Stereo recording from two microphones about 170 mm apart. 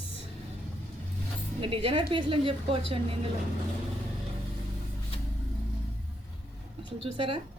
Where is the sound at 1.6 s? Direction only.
30° right (ahead or behind).